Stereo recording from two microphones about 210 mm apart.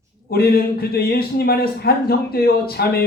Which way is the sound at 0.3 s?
45° left (ahead or behind).